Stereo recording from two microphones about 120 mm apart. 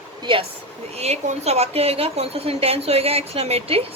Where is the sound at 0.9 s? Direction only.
60° right (ahead or behind).